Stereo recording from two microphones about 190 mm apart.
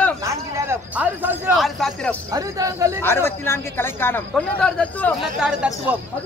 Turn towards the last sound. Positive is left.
turn(degrees=-5)  # may be behind; listen again after turning